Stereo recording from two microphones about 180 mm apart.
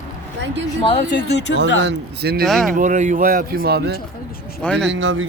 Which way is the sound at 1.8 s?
65° right (ahead or behind).